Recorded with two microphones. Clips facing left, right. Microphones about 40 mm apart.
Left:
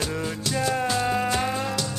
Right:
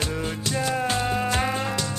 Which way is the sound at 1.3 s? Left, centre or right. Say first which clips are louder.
Even; right.